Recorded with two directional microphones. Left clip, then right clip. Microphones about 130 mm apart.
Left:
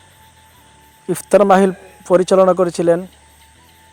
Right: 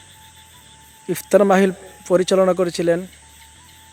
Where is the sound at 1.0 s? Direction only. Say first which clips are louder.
Left 3 dB; 10° left (ahead or behind).